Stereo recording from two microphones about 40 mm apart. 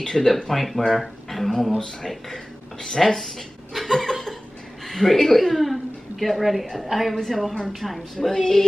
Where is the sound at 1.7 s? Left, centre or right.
Centre.